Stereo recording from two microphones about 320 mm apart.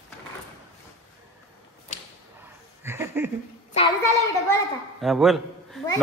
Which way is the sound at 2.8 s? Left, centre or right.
Centre.